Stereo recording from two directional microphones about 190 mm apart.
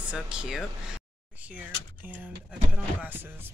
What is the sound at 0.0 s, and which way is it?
Speech, 5° right (ahead or behind).